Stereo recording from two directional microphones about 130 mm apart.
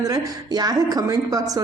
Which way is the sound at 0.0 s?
30° right (ahead or behind).